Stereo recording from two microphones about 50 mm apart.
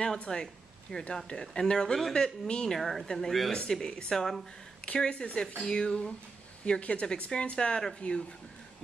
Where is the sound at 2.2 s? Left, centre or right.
Centre.